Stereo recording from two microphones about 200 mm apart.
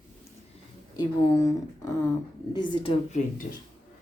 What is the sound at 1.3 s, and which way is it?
Speech, 15° left (ahead or behind).